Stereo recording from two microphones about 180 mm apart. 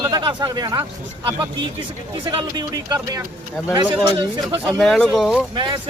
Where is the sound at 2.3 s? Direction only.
20° right (ahead or behind).